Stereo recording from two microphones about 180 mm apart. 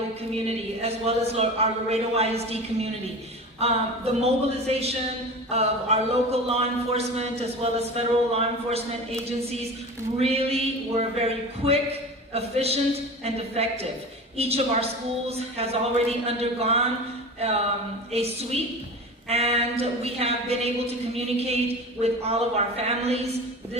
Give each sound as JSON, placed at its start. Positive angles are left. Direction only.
{"t": 0.4, "sound": "speech", "side_deg": -35}
{"t": 18.1, "sound": "speech", "side_deg": -35}